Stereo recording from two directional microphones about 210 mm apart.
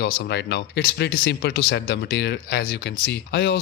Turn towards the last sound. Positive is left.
turn(degrees=50)  # may be behind; listen again after turning